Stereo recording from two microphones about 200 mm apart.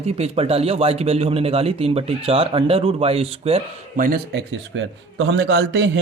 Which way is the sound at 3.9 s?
45° right (ahead or behind).